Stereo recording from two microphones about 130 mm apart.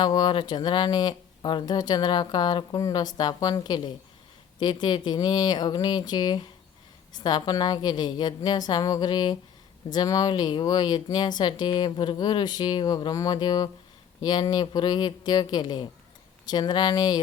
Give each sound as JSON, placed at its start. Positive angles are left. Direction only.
{"t": 0.0, "sound": "speech", "side_deg": 35}